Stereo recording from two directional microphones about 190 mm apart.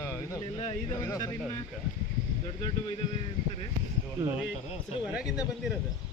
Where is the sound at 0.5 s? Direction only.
30° left (ahead or behind).